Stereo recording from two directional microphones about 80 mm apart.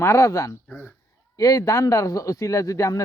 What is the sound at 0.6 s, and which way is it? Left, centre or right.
Speech, left.